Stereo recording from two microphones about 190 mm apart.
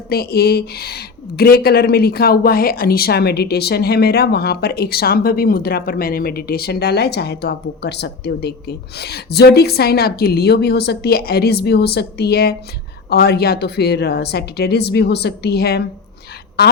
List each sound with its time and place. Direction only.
0.1 s a woman's voice: 55° left (ahead or behind)